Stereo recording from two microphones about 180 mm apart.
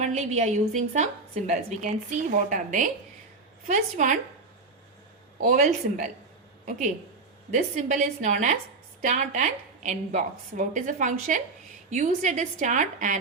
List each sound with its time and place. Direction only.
0.0 s a woman's voice: 40° right (ahead or behind)
5.4 s a woman's voice: 45° right (ahead or behind)